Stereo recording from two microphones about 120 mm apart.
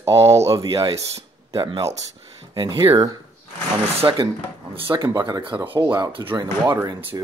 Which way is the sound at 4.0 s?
40° right (ahead or behind).